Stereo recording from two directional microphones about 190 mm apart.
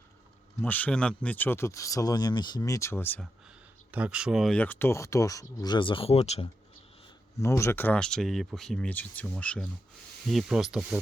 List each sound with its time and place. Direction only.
0.6 s speech: 10° left (ahead or behind)
3.9 s speech: 5° right (ahead or behind); by 6.5 s 35° left (ahead or behind)
7.3 s speech: 15° left (ahead or behind); by 11.0 s 5° right (ahead or behind)